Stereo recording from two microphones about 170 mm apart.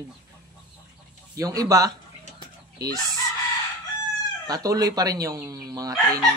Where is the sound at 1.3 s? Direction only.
20° right (ahead or behind).